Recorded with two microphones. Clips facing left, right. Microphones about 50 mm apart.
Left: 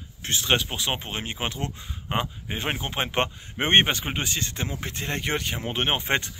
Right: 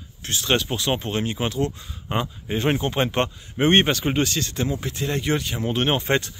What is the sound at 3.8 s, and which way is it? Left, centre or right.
Speech, centre.